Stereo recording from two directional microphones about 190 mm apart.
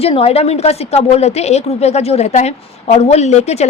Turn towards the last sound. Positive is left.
turn(degrees=35)  # may be behind; listen again after turning